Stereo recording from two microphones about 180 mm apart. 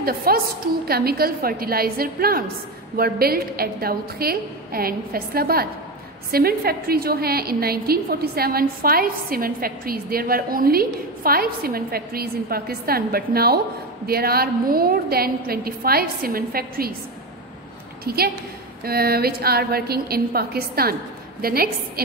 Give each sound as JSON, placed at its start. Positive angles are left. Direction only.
{"t": 0.0, "sound": "a woman's voice", "side_deg": -55}
{"t": 18.0, "sound": "a woman's voice", "side_deg": -60}